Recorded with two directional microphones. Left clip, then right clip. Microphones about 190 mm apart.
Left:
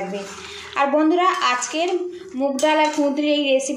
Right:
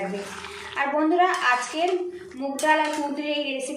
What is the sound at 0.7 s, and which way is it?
A woman's voice, 40° left (ahead or behind).